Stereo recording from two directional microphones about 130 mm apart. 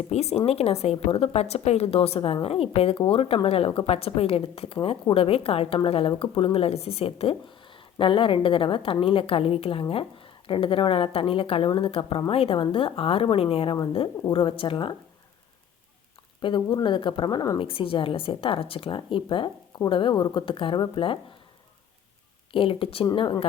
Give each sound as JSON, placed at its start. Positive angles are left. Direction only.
{"t": 0.1, "sound": "a woman's voice", "side_deg": 55}
{"t": 16.4, "sound": "a woman's voice", "side_deg": 35}
{"t": 22.5, "sound": "a woman's voice", "side_deg": 45}